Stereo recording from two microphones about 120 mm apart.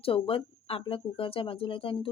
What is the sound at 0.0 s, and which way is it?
Speech, 50° left (ahead or behind).